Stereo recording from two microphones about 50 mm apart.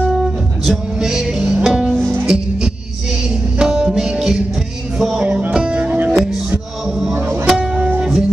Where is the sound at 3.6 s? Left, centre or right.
Centre.